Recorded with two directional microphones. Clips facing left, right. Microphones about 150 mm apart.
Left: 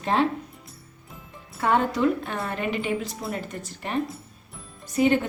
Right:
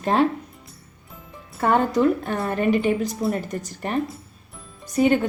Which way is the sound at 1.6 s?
45° right (ahead or behind).